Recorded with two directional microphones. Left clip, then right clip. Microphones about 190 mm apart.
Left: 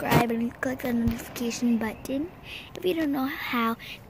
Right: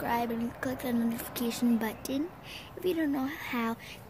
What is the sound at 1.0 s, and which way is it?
Speech, 10° right (ahead or behind).